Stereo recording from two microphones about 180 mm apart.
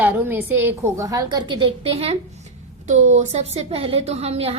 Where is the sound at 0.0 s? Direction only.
10° right (ahead or behind).